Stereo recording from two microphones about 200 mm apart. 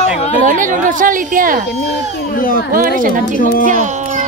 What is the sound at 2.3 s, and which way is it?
Speech, 45° left (ahead or behind).